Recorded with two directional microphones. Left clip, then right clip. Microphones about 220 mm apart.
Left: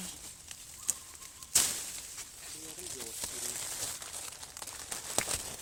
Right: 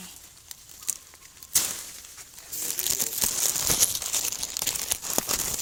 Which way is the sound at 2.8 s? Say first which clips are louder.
Right 14 dB; 50° right (ahead or behind).